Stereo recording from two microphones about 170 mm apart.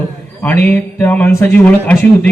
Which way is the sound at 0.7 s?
10° left (ahead or behind).